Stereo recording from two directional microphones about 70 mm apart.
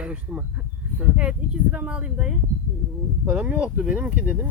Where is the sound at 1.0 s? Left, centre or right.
Centre.